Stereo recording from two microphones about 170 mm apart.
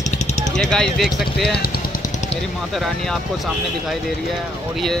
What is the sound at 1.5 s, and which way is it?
Speech, 65° left (ahead or behind).